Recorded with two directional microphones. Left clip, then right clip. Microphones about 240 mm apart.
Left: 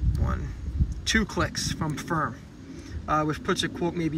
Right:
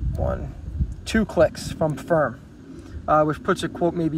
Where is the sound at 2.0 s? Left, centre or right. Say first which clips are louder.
Right 7 dB; centre.